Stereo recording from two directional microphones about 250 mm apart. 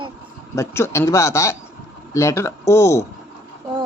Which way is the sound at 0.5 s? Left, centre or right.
Centre.